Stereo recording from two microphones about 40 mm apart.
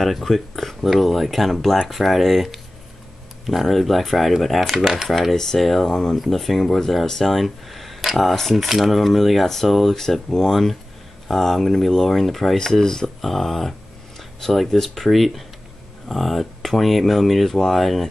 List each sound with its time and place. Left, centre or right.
0.0 s speech: centre
5.3 s speech: centre
6.1 s speech: centre